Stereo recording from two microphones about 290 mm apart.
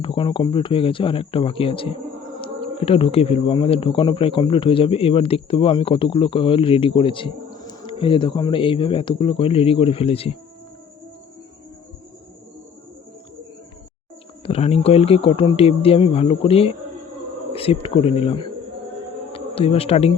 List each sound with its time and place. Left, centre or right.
0.0 s speech: centre
14.4 s speech: left